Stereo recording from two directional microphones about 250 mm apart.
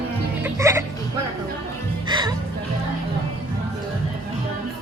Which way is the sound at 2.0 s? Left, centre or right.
Centre.